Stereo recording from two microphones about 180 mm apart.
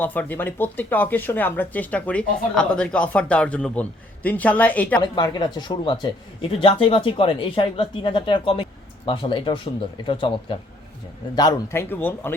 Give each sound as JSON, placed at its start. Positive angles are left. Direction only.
{"t": 0.0, "sound": "speech", "side_deg": 10}
{"t": 5.1, "sound": "speech", "side_deg": 25}